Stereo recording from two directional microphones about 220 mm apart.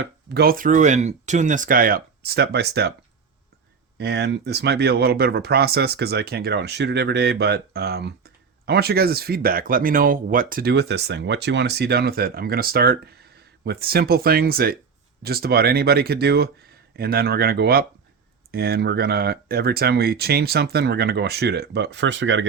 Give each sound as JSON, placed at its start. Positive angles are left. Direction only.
{"t": 0.0, "sound": "speech", "side_deg": -45}
{"t": 3.9, "sound": "speech", "side_deg": -50}